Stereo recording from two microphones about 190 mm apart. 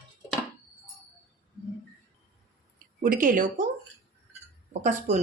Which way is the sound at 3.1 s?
45° right (ahead or behind).